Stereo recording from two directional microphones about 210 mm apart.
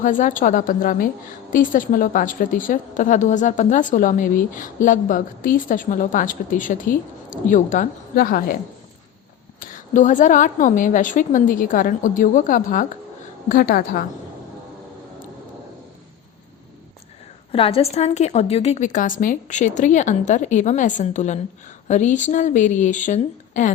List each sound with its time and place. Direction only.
0.0 s a woman's voice: 40° left (ahead or behind)
9.6 s a woman's voice: 40° left (ahead or behind)
17.5 s a woman's voice: 25° left (ahead or behind)